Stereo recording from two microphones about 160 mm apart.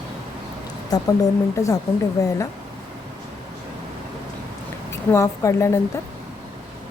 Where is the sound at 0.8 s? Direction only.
25° left (ahead or behind).